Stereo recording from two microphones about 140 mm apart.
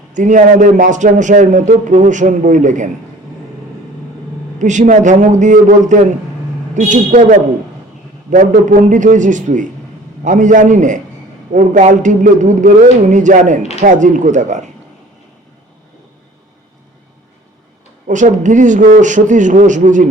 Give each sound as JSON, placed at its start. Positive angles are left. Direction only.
{"t": 0.1, "sound": "a man's voice", "side_deg": -65}
{"t": 4.6, "sound": "a man's voice", "side_deg": -60}
{"t": 18.1, "sound": "a man's voice", "side_deg": -65}